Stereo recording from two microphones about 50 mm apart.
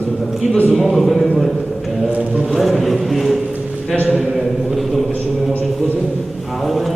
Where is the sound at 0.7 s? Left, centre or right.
Centre.